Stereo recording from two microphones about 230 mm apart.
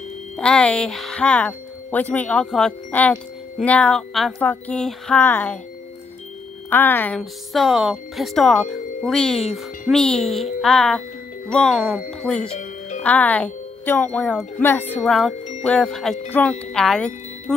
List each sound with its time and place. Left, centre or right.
0.4 s speech: centre
6.7 s speech: centre
12.4 s music: left
13.0 s speech: centre